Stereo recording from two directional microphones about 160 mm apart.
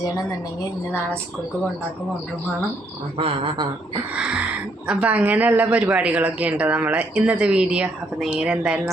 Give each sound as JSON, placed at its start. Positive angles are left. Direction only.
{"t": 3.2, "sound": "speech", "side_deg": -35}
{"t": 4.1, "sound": "speech", "side_deg": -5}